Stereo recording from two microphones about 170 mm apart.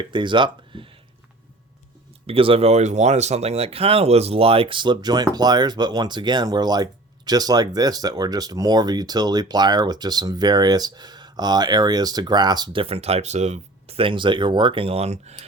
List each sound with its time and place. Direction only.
0.0 s speech: 30° right (ahead or behind)
2.2 s speech: 35° right (ahead or behind)